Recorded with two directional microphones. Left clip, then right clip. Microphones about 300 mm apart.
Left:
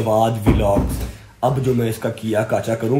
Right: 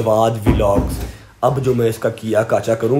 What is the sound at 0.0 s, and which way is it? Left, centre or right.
Speech, centre.